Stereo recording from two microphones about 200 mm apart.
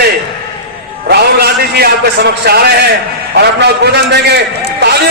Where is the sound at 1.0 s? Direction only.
55° right (ahead or behind).